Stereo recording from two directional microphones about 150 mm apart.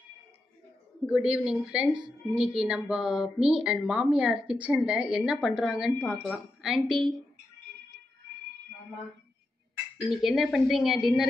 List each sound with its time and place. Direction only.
1.0 s a woman's voice: 5° right (ahead or behind)
10.0 s a woman's voice: centre (ahead or behind)